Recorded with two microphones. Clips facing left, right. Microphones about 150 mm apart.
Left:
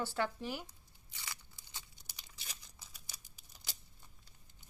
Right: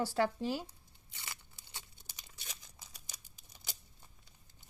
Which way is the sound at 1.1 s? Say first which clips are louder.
Even; 20° right (ahead or behind).